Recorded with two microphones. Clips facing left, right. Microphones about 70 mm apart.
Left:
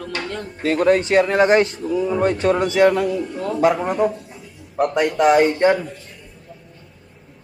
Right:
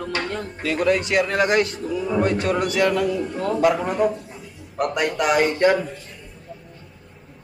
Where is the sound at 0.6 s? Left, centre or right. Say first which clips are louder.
Left 5 dB; left.